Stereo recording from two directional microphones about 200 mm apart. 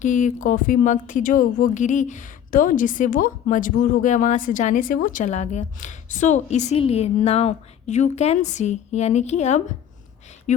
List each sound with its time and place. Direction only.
0.0 s a woman's voice: 40° left (ahead or behind)